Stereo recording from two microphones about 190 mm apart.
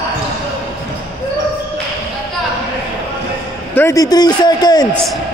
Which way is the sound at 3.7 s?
15° left (ahead or behind).